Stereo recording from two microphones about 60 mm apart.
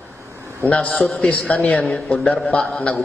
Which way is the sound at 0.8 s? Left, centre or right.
Left.